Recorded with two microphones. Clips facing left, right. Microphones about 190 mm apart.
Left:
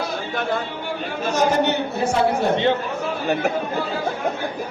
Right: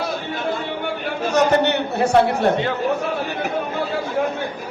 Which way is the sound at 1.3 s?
65° right (ahead or behind).